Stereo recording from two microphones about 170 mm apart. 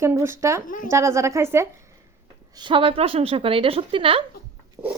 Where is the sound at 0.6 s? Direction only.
50° left (ahead or behind).